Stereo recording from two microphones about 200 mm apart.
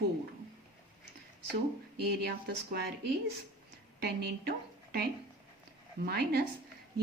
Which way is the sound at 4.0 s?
50° right (ahead or behind).